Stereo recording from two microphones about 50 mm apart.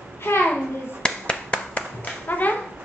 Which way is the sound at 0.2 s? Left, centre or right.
Left.